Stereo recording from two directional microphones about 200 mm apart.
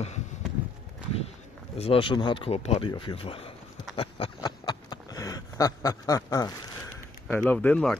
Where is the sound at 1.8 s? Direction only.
25° left (ahead or behind).